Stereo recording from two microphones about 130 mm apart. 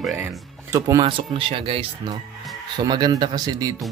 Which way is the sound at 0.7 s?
25° right (ahead or behind).